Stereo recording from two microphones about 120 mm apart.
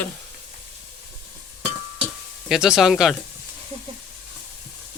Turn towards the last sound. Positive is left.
turn(degrees=0)  # may be behind; listen again after turning